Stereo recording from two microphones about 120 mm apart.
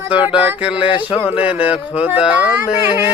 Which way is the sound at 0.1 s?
10° right (ahead or behind).